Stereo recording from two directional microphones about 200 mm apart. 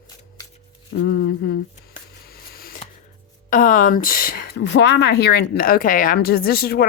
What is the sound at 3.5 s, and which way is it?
Speech, 40° left (ahead or behind).